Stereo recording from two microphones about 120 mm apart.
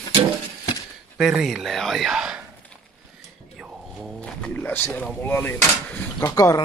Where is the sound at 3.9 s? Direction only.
Centre (ahead or behind).